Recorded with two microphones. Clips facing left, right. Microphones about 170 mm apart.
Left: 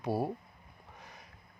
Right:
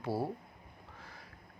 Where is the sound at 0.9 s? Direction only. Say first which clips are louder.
Left 1 dB; 20° left (ahead or behind).